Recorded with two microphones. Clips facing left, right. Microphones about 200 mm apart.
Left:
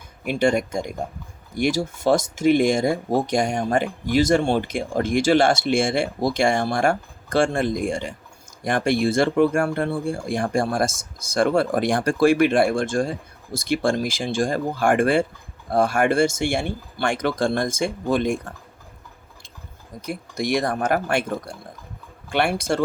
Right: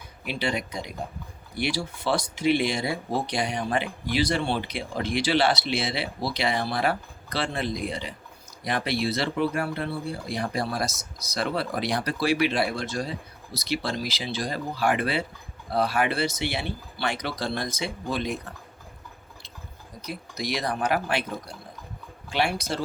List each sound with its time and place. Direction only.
0.3 s speech: 50° left (ahead or behind)
20.0 s speech: 50° left (ahead or behind)